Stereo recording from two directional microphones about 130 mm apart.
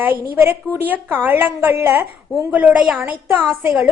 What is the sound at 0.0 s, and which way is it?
A woman's voice, 15° right (ahead or behind).